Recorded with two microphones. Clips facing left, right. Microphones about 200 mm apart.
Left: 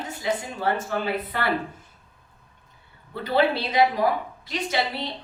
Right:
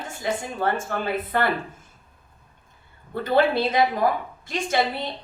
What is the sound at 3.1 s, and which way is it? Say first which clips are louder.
A woman's voice: right 2 dB; 50° right (ahead or behind).